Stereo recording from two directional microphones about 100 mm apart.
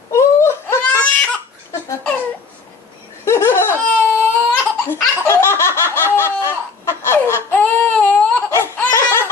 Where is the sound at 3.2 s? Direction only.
25° left (ahead or behind).